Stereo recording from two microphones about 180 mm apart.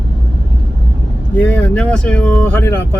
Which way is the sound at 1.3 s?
10° left (ahead or behind).